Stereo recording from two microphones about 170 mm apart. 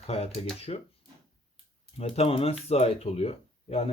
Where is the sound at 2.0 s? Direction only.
35° left (ahead or behind).